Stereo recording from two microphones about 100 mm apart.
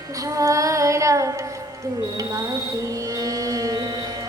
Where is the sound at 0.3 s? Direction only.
35° right (ahead or behind).